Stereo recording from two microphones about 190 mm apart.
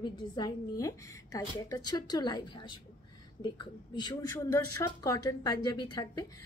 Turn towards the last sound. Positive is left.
turn(degrees=20)  # may be behind; listen again after turning